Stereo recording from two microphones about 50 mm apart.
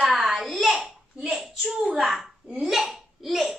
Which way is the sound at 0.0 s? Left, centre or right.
Centre.